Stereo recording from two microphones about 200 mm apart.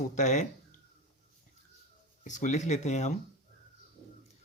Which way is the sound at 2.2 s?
40° left (ahead or behind).